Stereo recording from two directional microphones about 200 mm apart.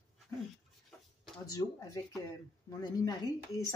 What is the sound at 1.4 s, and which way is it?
Speech, 20° left (ahead or behind).